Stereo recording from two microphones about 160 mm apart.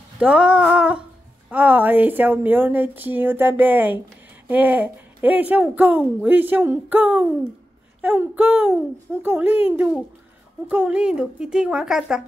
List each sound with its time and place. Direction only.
0.2 s a woman's voice: 5° right (ahead or behind)